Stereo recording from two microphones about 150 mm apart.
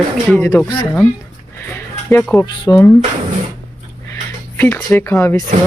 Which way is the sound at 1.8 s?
15° left (ahead or behind).